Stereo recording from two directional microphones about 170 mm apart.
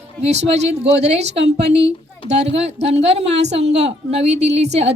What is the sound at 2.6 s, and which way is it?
A woman's voice, 40° right (ahead or behind).